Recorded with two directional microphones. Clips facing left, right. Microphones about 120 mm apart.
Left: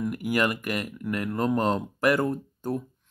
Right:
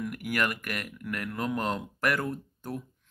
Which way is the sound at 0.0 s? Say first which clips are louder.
Left 5 dB; 30° left (ahead or behind).